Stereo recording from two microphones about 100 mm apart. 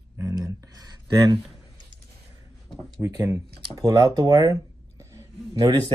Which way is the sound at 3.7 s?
40° right (ahead or behind).